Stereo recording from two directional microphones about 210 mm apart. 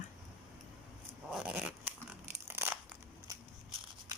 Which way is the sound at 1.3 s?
5° right (ahead or behind).